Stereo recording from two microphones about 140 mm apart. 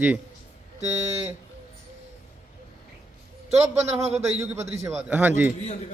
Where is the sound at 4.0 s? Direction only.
50° right (ahead or behind).